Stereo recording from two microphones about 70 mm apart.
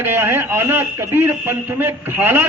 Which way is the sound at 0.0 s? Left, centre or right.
Right.